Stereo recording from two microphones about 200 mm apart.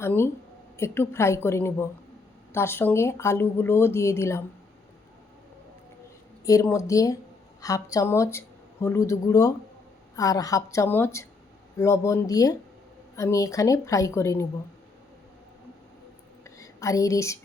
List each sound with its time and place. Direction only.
0.0 s speech: 10° left (ahead or behind)
6.4 s speech: 15° left (ahead or behind)
16.4 s whispering: 15° left (ahead or behind)